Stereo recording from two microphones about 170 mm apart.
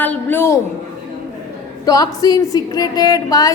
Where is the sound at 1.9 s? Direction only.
20° left (ahead or behind).